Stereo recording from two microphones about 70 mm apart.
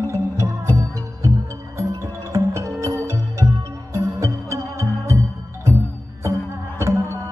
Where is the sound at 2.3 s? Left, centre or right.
Right.